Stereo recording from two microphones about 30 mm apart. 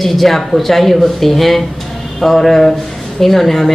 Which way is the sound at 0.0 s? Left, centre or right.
Centre.